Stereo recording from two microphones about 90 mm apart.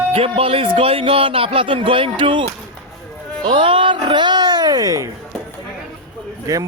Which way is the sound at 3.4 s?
75° right (ahead or behind).